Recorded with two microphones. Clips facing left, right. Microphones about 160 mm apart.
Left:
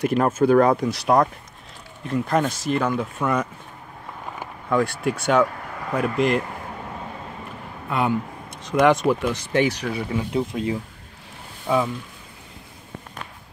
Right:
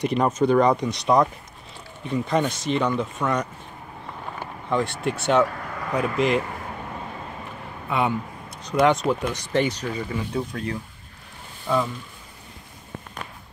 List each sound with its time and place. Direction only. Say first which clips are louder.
0.0 s speech: left 2 dB; 5° left (ahead or behind)
4.6 s speech: left 3 dB; 25° right (ahead or behind)
5.4 s speech: left 1 dB; centre (ahead or behind)
7.9 s speech: left 1 dB; centre (ahead or behind)